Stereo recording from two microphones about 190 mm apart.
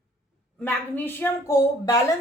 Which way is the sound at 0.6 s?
10° left (ahead or behind).